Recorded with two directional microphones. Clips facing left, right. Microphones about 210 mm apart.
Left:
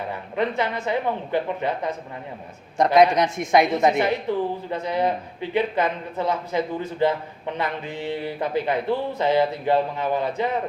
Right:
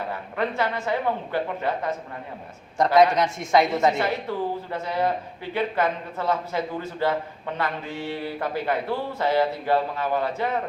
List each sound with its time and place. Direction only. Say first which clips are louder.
0.3 s speech: left 2 dB; 20° left (ahead or behind)